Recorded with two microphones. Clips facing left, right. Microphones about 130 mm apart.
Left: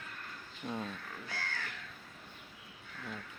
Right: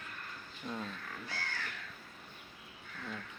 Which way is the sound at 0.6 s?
15° left (ahead or behind).